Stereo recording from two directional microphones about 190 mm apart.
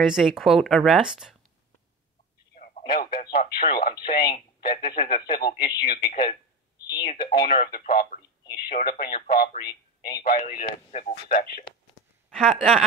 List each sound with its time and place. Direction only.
0.0 s speech: 5° right (ahead or behind)
2.5 s telephone: 45° left (ahead or behind)
3.5 s speech: 50° left (ahead or behind)
12.3 s speech: centre (ahead or behind)